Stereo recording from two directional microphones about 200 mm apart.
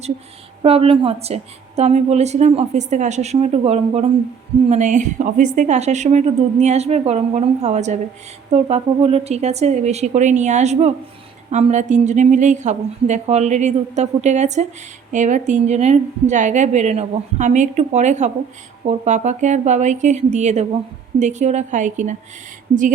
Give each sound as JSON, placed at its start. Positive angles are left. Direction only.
{"t": 0.6, "sound": "a woman's voice", "side_deg": -30}